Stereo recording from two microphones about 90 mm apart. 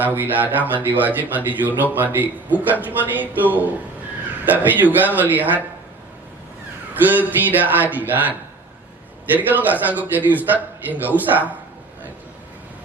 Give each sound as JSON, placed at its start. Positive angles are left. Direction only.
{"t": 0.0, "sound": "a man's voice", "side_deg": -20}
{"t": 7.1, "sound": "a man's voice", "side_deg": -20}